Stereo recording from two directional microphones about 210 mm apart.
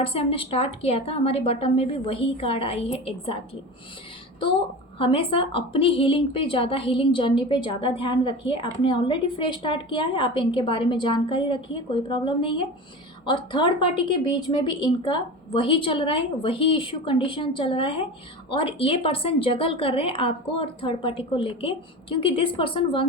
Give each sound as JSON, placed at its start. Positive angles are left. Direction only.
{"t": 0.0, "sound": "a woman's voice", "side_deg": 25}
{"t": 4.9, "sound": "a woman's voice", "side_deg": 25}